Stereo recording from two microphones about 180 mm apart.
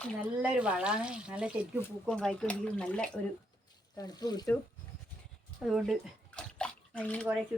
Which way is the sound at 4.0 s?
20° left (ahead or behind).